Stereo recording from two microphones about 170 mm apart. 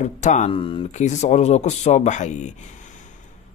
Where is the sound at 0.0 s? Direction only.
45° left (ahead or behind).